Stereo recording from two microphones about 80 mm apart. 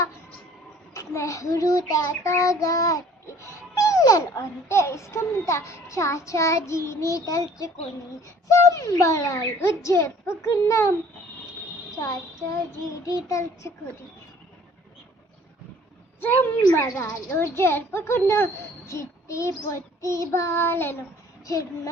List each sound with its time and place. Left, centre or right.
0.9 s a child's voice: left
13.1 s a child's voice: left
16.2 s a woman's voice: left